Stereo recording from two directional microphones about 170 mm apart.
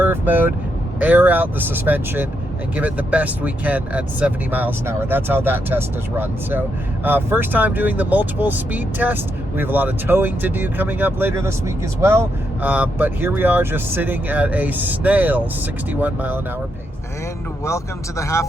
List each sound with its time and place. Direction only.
0.0 s speech: 10° right (ahead or behind)
12.6 s speech: 10° right (ahead or behind)
18.2 s a man's voice: 15° left (ahead or behind)